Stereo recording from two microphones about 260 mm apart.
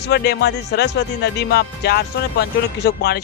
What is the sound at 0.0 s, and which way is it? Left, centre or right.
Speech, left.